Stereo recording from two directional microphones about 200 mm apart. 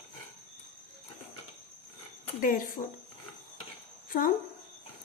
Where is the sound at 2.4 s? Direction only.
40° left (ahead or behind).